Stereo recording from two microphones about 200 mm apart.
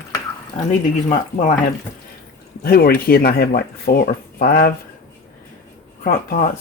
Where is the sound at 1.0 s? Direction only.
35° left (ahead or behind).